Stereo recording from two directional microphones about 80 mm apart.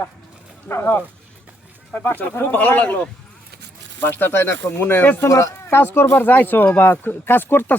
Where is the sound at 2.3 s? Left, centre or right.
Left.